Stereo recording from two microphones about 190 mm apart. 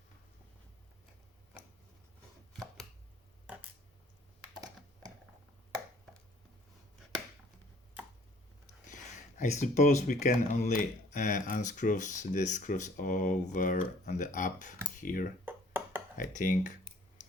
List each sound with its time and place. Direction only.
2.5 s chopping: centre (ahead or behind)
9.4 s speech: 40° left (ahead or behind)
15.4 s a sound: 10° right (ahead or behind)
16.1 s speech: 45° left (ahead or behind)